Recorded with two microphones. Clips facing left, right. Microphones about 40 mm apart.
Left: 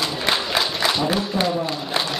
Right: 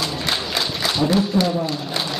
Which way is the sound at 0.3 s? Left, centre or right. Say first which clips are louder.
Left 4 dB; centre.